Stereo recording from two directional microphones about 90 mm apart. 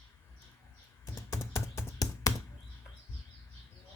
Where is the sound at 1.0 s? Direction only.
35° left (ahead or behind).